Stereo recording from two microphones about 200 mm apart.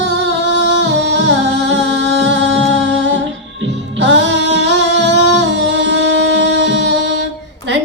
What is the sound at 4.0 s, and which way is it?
Music, 60° right (ahead or behind).